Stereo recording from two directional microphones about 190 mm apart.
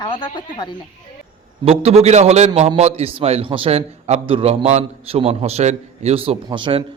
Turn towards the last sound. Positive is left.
turn(degrees=-25)  # may be behind; listen again after turning